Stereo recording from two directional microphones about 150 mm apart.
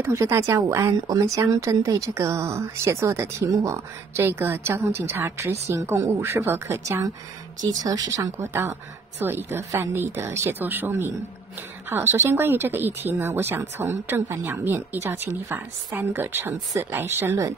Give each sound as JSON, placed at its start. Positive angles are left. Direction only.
{"t": 0.0, "sound": "speech", "side_deg": -20}
{"t": 7.8, "sound": "speech", "side_deg": -25}